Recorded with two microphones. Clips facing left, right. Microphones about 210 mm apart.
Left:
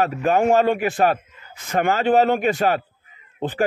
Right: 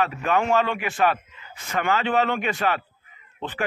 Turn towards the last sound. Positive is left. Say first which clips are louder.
# left 7 dB
turn(degrees=45)  # may be behind; listen again after turning